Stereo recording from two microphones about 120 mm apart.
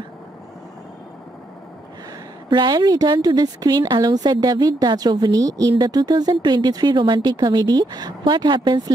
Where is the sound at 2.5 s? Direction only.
35° right (ahead or behind).